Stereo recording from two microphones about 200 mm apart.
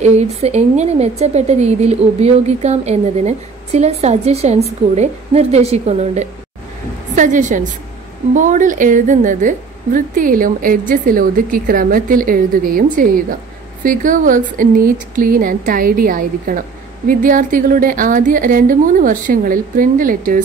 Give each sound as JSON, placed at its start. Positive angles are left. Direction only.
{"t": 0.0, "sound": "a woman's voice", "side_deg": -35}